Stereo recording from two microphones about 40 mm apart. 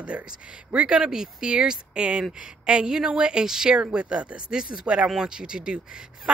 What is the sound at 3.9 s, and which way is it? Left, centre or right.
Speech, right.